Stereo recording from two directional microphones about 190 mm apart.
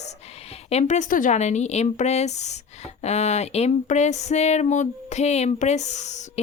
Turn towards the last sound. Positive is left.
turn(degrees=40)  # may be behind; listen again after turning